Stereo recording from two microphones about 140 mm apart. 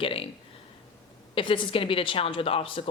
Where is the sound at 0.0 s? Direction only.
40° left (ahead or behind).